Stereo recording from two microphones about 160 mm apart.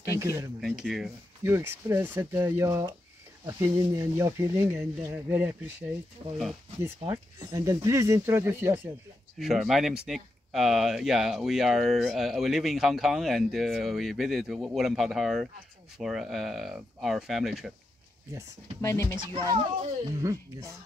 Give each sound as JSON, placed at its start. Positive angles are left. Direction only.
{"t": 0.0, "sound": "speech", "side_deg": -20}
{"t": 0.6, "sound": "speech", "side_deg": 0}
{"t": 1.4, "sound": "speech", "side_deg": -15}
{"t": 7.1, "sound": "speech", "side_deg": -20}
{"t": 9.4, "sound": "speech", "side_deg": 0}
{"t": 18.8, "sound": "speech", "side_deg": 20}
{"t": 19.1, "sound": "speech", "side_deg": -30}